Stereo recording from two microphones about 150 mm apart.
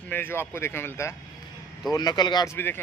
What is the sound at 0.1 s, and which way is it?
A man's voice, 15° left (ahead or behind).